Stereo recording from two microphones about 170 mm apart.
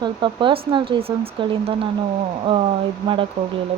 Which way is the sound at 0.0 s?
30° right (ahead or behind).